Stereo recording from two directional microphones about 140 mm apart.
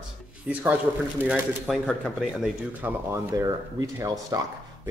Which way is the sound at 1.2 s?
15° right (ahead or behind).